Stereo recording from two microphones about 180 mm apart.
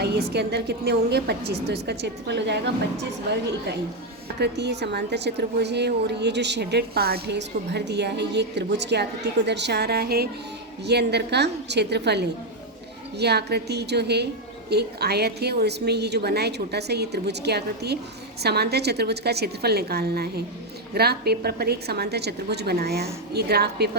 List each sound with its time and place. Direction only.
0.0 s a woman's voice: 65° right (ahead or behind)